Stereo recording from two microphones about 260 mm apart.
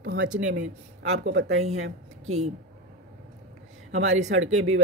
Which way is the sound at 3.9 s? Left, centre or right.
Right.